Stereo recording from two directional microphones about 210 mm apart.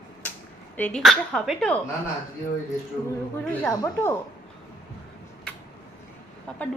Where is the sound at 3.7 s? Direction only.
15° left (ahead or behind).